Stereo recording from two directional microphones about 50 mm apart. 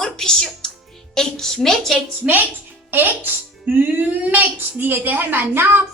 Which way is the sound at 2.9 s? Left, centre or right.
Right.